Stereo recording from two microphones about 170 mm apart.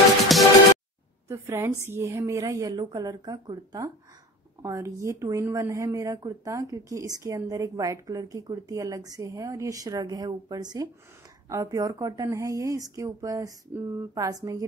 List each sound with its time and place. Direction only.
0.3 s music: centre (ahead or behind)
1.3 s a woman's voice: 15° right (ahead or behind)